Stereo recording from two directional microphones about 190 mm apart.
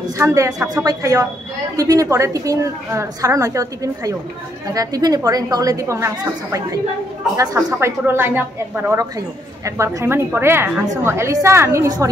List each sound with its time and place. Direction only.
0.2 s a woman's voice: 15° right (ahead or behind)